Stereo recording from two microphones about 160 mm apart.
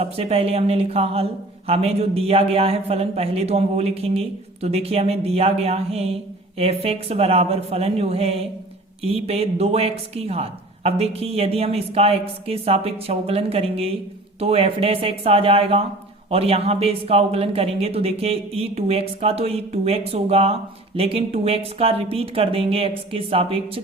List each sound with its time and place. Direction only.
0.0 s speech: 40° right (ahead or behind)